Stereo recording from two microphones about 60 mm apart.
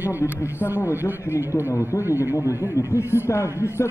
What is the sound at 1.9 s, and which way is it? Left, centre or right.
Speech, left.